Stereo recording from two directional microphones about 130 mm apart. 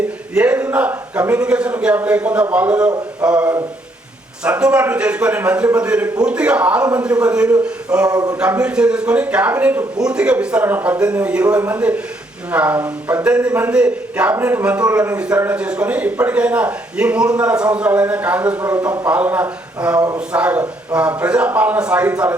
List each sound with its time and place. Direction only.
0.3 s a sound: 10° right (ahead or behind)
1.3 s a man's voice: 10° right (ahead or behind)
8.1 s a man's voice: 30° right (ahead or behind)
8.4 s a man's voice: 10° right (ahead or behind)